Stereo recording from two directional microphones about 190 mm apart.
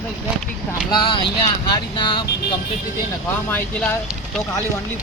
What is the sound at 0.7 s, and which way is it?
Speech, 20° left (ahead or behind).